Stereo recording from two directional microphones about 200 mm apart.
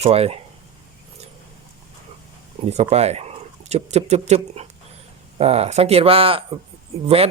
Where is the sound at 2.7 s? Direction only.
35° right (ahead or behind).